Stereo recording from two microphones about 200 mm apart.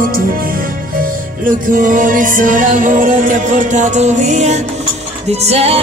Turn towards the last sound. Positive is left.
turn(degrees=-30)  # may be behind; listen again after turning